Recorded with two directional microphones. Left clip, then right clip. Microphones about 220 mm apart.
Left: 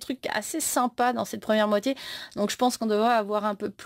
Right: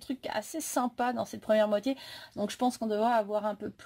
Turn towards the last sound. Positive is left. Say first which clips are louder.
# left 5 dB
turn(degrees=40)  # may be behind; listen again after turning